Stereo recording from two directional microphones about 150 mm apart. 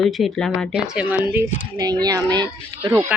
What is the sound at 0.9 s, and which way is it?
Speech, 10° right (ahead or behind).